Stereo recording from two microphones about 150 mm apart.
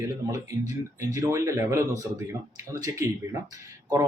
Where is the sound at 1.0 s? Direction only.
20° right (ahead or behind).